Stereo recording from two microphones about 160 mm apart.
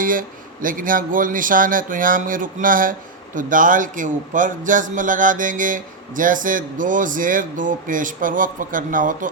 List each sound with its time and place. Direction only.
0.0 s a man's voice: 60° right (ahead or behind)